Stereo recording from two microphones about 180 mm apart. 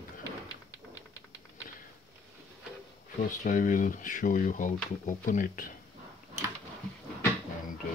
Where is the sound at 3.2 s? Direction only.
45° left (ahead or behind).